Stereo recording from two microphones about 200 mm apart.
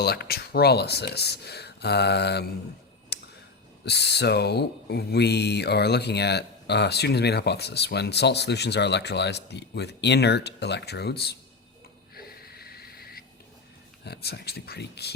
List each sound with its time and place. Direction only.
0.0 s speech: 55° left (ahead or behind)
3.1 s a sound: 55° left (ahead or behind)
3.8 s speech: 55° left (ahead or behind)
12.1 s wheeze: 50° left (ahead or behind)
14.0 s speech: 55° left (ahead or behind)